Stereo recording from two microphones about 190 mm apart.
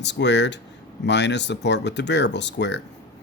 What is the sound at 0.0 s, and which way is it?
Speech, 65° left (ahead or behind).